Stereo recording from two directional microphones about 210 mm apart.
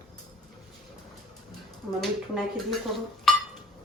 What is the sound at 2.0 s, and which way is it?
Speech, centre (ahead or behind).